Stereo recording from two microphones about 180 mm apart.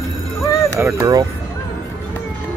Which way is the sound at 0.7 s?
15° right (ahead or behind).